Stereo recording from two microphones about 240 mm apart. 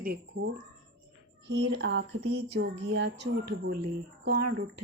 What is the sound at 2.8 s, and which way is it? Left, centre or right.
Speech, right.